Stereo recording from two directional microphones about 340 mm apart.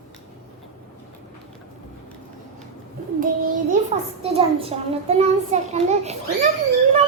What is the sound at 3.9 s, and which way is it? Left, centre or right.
A child's voice, centre.